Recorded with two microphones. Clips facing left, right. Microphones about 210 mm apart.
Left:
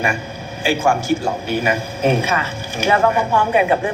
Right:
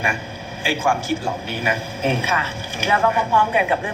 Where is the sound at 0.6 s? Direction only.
45° left (ahead or behind).